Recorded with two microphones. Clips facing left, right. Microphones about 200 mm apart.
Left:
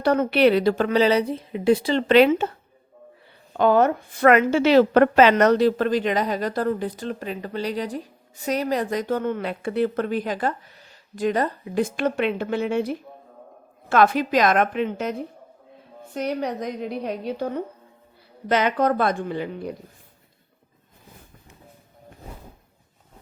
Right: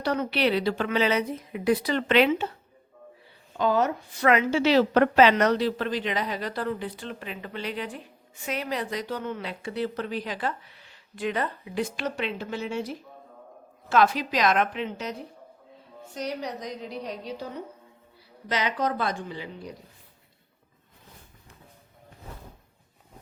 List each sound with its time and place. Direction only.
0.0 s a woman's voice: 50° left (ahead or behind)
3.6 s a woman's voice: 55° left (ahead or behind)
16.1 s a woman's voice: 55° left (ahead or behind)